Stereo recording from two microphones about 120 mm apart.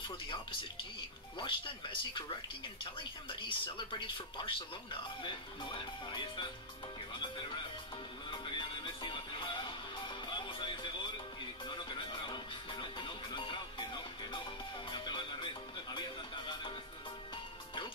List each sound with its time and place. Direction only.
1.4 s speech: 45° left (ahead or behind)
8.3 s music: 45° left (ahead or behind)